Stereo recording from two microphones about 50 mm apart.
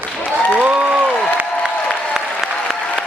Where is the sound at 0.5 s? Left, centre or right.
Right.